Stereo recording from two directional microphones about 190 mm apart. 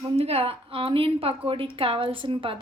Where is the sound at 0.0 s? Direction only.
30° right (ahead or behind).